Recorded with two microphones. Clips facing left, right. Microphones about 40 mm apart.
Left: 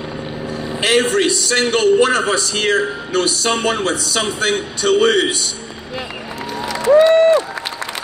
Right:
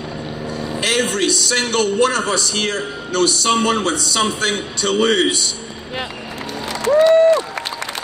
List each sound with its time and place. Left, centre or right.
0.7 s a man's voice: left
3.2 s a man's voice: centre
7.0 s a sound: left